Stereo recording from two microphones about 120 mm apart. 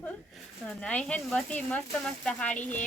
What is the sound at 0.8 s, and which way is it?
Speech, 10° left (ahead or behind).